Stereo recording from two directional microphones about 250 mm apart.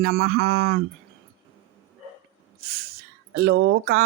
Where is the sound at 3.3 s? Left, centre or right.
Right.